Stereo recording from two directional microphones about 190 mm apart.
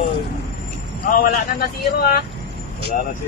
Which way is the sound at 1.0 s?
50° left (ahead or behind).